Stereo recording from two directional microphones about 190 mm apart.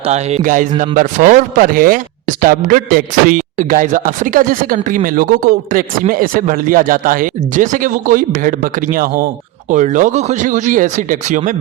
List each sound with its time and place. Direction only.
0.0 s a man's voice: 35° right (ahead or behind)